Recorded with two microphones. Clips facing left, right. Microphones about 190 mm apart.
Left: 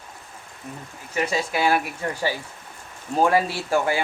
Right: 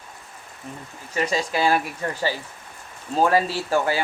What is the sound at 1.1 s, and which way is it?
Speech, 10° left (ahead or behind).